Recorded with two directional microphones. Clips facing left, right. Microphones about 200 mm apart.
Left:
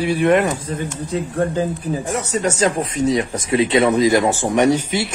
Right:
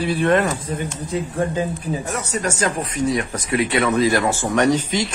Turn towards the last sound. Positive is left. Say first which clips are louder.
# left 2 dB
turn(degrees=10)  # may be behind; listen again after turning